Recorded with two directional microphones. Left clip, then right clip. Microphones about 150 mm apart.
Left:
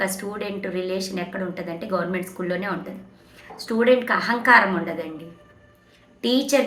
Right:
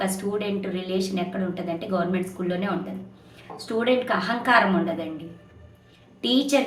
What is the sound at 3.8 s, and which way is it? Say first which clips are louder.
Speech: left 5 dB; 45° right (ahead or behind).